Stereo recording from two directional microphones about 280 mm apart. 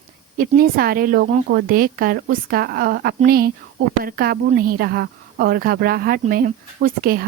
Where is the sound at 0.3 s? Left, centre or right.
Right.